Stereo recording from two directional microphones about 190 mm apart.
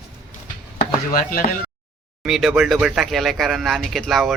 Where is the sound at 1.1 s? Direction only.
50° left (ahead or behind).